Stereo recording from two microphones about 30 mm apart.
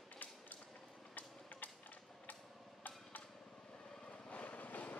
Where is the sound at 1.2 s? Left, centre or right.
Left.